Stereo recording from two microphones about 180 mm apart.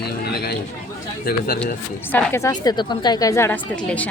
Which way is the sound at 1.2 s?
55° left (ahead or behind).